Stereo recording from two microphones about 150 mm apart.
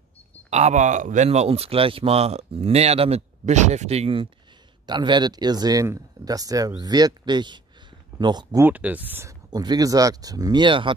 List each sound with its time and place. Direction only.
0.5 s speech: 50° right (ahead or behind)
4.8 s speech: 30° right (ahead or behind)
8.6 s speech: 10° right (ahead or behind)
9.5 s speech: 25° right (ahead or behind)